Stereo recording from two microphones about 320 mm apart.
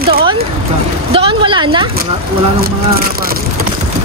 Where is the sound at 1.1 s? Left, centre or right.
Centre.